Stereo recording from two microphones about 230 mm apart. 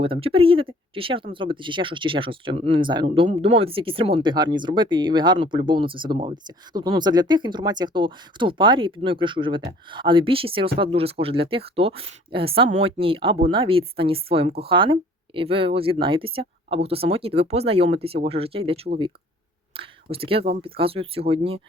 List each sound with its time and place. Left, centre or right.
0.0 s speech: right